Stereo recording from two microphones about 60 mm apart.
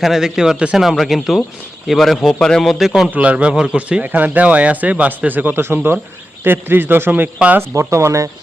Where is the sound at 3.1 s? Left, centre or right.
Right.